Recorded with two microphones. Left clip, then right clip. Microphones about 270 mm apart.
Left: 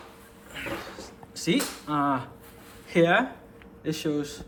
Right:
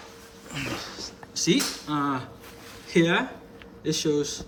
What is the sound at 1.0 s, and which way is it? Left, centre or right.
A man's voice, centre.